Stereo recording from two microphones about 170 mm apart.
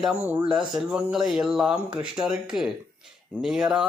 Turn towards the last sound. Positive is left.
turn(degrees=-5)  # may be behind; listen again after turning